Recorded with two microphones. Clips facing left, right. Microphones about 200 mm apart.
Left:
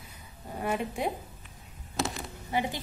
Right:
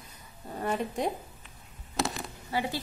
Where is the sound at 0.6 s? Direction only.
10° left (ahead or behind).